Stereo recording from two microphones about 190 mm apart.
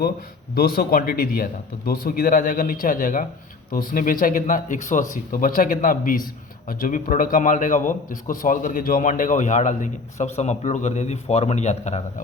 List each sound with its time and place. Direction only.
0.0 s a man's voice: 50° left (ahead or behind)